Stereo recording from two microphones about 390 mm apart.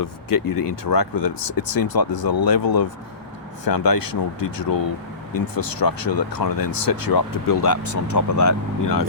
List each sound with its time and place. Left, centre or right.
0.0 s speech: left